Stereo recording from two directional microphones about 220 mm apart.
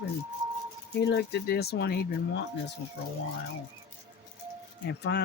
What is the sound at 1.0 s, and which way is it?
Speech, 50° left (ahead or behind).